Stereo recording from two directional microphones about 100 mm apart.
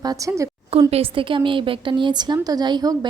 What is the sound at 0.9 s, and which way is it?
A woman's voice, 75° right (ahead or behind).